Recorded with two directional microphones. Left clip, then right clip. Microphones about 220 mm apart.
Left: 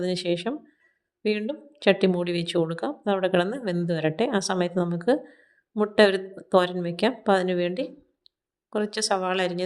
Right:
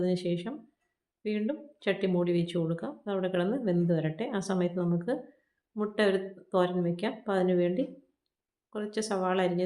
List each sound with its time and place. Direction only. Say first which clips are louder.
0.0 s speech: left 5 dB; 40° left (ahead or behind)